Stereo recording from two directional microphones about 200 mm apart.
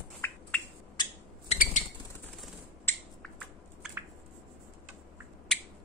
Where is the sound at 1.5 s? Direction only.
40° left (ahead or behind).